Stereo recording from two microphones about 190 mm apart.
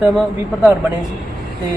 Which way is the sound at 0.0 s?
Centre (ahead or behind).